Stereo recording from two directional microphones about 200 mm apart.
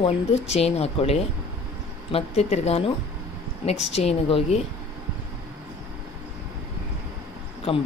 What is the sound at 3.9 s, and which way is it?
Speech, 30° left (ahead or behind).